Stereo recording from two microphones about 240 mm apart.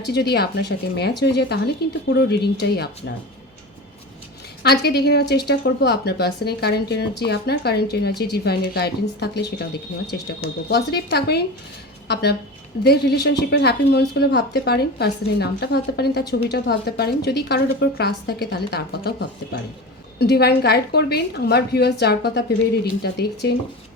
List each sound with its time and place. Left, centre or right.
0.0 s speech: left
4.6 s speech: left
20.1 s speech: left